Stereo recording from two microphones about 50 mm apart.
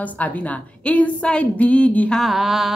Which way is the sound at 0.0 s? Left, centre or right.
Left.